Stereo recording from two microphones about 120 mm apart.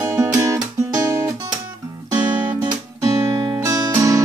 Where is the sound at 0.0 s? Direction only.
30° right (ahead or behind).